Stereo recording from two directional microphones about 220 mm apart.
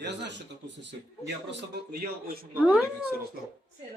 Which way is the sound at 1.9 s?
40° right (ahead or behind).